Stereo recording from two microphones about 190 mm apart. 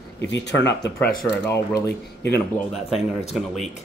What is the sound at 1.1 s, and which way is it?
Speech, 15° left (ahead or behind).